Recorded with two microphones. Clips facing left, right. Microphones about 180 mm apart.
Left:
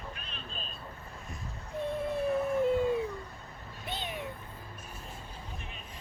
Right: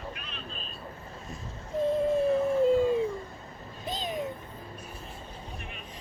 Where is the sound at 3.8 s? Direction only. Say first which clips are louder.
Right 6 dB; 35° right (ahead or behind).